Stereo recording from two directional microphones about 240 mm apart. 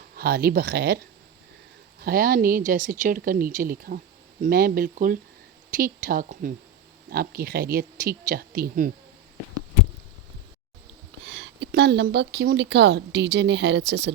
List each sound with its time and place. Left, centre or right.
0.2 s speech: right
11.3 s a woman's voice: right